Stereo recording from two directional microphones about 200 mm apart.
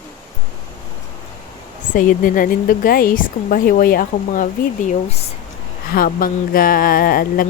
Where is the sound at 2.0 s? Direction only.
40° left (ahead or behind).